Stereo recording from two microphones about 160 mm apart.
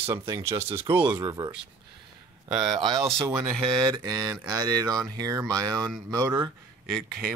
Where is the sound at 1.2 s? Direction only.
25° right (ahead or behind).